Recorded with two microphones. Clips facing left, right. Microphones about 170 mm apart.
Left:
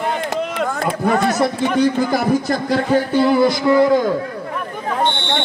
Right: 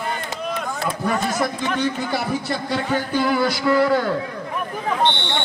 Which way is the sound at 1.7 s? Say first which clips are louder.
Left 8 dB; 40° left (ahead or behind).